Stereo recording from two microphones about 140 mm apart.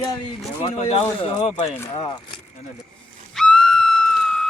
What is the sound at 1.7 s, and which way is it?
Speech, 25° left (ahead or behind).